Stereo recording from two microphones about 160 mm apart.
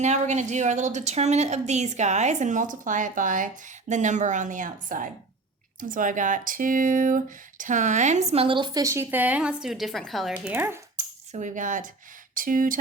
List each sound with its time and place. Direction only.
0.0 s a woman's voice: 45° right (ahead or behind); by 11.0 s 15° right (ahead or behind)
11.3 s a woman's voice: 50° right (ahead or behind)